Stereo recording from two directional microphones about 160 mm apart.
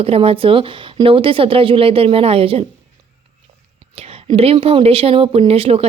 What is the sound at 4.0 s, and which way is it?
Speech, 40° right (ahead or behind).